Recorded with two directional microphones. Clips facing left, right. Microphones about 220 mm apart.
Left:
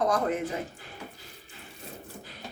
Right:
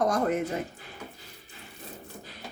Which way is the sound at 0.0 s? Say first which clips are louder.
Right 1 dB; 45° right (ahead or behind).